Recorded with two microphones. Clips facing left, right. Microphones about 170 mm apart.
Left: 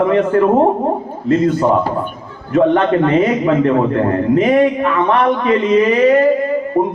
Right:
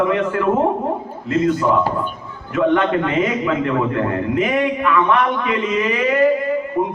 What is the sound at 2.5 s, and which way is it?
A man's voice, 35° left (ahead or behind).